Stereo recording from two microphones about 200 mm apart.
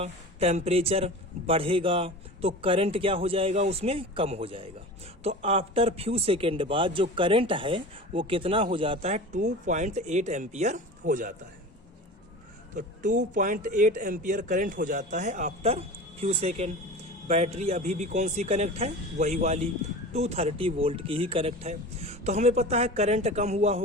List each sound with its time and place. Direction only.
0.0 s a man's voice: 30° right (ahead or behind)
12.7 s speech: 40° right (ahead or behind)